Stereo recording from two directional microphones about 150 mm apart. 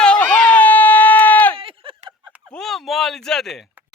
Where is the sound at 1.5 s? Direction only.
35° right (ahead or behind).